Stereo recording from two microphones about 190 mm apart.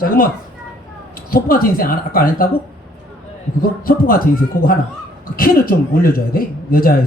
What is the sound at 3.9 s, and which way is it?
Speech, 50° left (ahead or behind).